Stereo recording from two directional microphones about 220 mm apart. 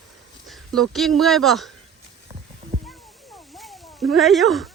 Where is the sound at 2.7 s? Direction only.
35° right (ahead or behind).